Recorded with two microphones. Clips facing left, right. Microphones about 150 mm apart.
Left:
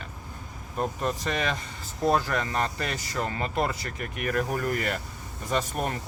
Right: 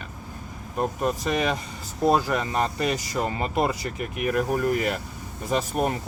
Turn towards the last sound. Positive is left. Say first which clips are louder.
# right 4 dB
turn(degrees=-10)  # may be behind; listen again after turning